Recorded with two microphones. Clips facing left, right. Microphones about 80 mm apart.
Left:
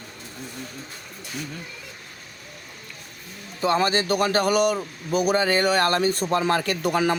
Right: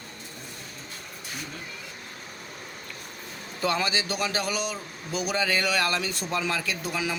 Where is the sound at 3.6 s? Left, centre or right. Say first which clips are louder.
Left 5 dB; left.